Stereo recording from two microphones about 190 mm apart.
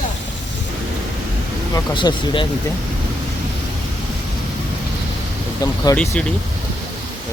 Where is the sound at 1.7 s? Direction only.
25° left (ahead or behind).